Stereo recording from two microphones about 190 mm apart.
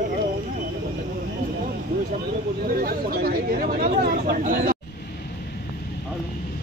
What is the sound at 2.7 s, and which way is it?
Speech, 50° right (ahead or behind).